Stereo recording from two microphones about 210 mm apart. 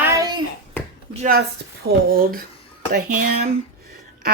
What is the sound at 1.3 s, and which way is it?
A woman's voice, 45° right (ahead or behind).